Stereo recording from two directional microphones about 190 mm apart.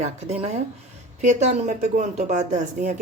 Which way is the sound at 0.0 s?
35° right (ahead or behind).